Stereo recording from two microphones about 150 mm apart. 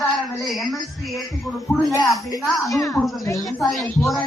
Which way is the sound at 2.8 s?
20° left (ahead or behind).